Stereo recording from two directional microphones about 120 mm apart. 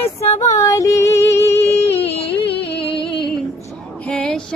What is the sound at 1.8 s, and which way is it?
Music, 55° left (ahead or behind).